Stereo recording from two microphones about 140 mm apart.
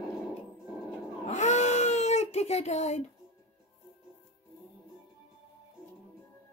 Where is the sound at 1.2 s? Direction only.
55° left (ahead or behind).